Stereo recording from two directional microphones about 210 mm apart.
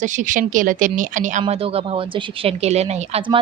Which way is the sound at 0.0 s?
35° right (ahead or behind).